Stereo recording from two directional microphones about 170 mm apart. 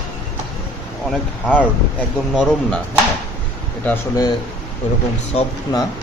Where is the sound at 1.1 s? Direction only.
10° left (ahead or behind).